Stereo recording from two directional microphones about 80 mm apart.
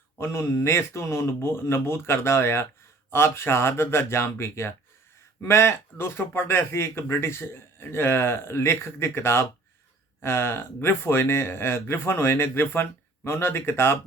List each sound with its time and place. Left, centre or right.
0.2 s speech: left